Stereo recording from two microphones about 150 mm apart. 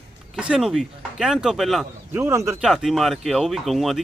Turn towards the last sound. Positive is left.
turn(degrees=0)  # may be behind; listen again after turning